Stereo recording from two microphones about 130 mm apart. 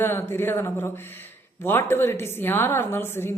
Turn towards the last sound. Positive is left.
turn(degrees=20)  # may be behind; listen again after turning